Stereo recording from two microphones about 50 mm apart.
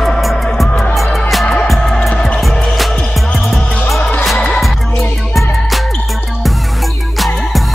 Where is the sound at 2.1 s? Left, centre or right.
Left.